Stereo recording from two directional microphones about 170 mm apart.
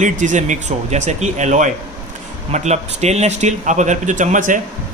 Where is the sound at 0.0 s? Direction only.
45° right (ahead or behind).